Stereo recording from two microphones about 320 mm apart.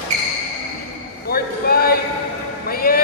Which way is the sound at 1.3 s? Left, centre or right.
Left.